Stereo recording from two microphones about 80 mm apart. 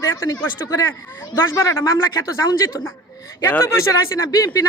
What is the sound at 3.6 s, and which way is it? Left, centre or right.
Speech, left.